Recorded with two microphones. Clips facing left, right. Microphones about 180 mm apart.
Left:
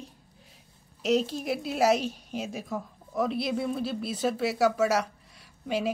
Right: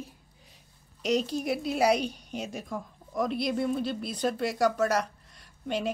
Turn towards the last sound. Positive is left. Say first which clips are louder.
# left 2 dB
turn(degrees=5)  # may be behind; listen again after turning